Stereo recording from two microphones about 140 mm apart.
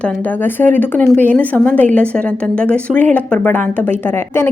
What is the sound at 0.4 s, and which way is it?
A woman's voice, 15° left (ahead or behind).